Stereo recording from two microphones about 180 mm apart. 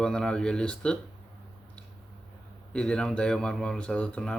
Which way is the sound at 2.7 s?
5° left (ahead or behind).